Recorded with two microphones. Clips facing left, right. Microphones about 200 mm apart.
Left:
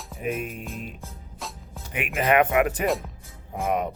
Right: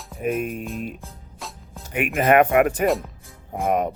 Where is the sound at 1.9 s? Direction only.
50° right (ahead or behind).